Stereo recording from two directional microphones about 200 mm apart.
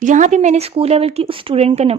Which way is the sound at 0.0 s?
40° right (ahead or behind).